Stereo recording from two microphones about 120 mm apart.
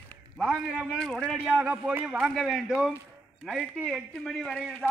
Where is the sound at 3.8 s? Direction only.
Centre (ahead or behind).